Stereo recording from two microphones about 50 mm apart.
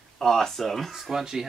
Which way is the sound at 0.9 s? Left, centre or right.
Centre.